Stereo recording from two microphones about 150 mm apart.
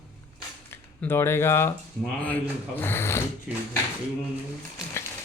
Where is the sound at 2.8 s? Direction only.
15° left (ahead or behind).